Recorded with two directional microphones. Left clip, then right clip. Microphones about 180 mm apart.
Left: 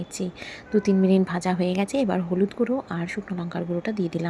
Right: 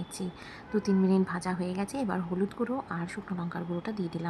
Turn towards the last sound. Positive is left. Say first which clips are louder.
# left 8 dB
turn(degrees=15)  # may be behind; listen again after turning